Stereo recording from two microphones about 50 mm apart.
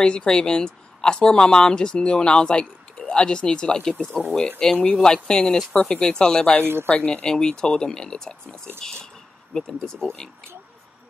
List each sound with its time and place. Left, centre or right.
0.0 s speech: centre
4.2 s speech: right
4.6 s speech: centre
6.6 s speech: right
6.9 s speech: left